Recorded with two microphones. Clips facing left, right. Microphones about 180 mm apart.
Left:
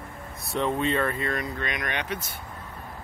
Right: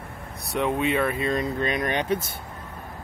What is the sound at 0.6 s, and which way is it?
Speech, 10° right (ahead or behind).